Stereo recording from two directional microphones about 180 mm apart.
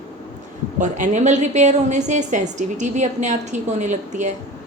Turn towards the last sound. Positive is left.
turn(degrees=-40)  # may be behind; listen again after turning